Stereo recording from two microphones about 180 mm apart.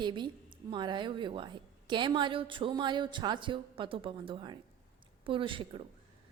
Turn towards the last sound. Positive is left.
turn(degrees=-30)  # may be behind; listen again after turning